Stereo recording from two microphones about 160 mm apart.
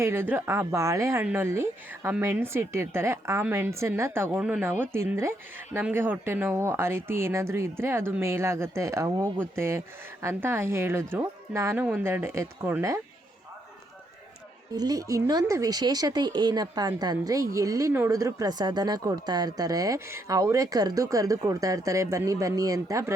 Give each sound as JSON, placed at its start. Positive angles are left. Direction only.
{"t": 0.0, "sound": "speech", "side_deg": -15}
{"t": 14.7, "sound": "speech", "side_deg": -25}